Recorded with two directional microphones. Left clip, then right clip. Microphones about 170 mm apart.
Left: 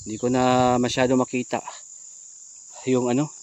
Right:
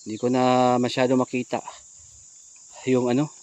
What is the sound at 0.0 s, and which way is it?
Speech, 10° left (ahead or behind).